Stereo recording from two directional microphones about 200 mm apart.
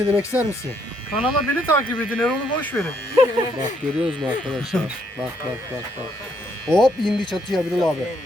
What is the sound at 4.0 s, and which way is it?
Speech, centre (ahead or behind).